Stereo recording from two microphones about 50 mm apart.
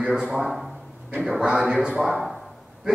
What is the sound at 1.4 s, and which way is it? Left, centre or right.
Speech, centre.